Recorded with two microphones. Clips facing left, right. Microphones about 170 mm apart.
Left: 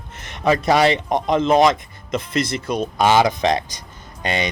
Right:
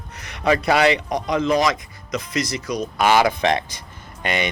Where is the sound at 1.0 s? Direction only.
50° left (ahead or behind).